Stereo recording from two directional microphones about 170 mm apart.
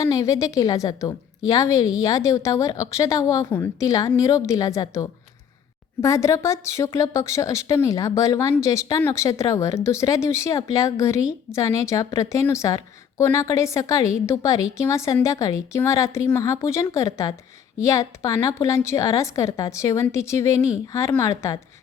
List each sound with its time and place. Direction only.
0.0 s a woman's voice: 20° left (ahead or behind)